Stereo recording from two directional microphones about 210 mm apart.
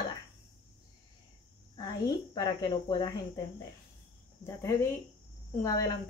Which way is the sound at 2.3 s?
20° left (ahead or behind).